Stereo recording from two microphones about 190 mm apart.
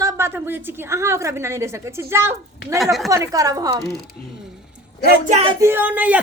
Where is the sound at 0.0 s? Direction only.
15° right (ahead or behind).